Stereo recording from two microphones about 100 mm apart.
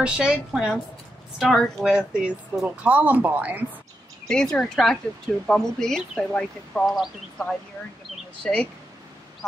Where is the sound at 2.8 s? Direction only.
15° right (ahead or behind).